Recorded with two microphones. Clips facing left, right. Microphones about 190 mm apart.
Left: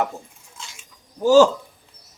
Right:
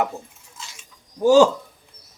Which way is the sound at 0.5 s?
Centre (ahead or behind).